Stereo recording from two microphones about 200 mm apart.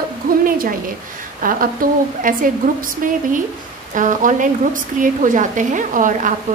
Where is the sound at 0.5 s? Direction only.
45° right (ahead or behind).